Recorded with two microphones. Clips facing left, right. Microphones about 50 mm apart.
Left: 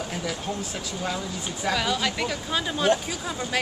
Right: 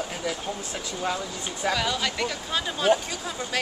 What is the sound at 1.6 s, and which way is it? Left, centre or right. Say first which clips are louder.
Speech: left 1 dB; centre.